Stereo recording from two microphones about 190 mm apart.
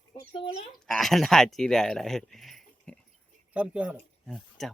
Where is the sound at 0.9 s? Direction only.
Centre (ahead or behind).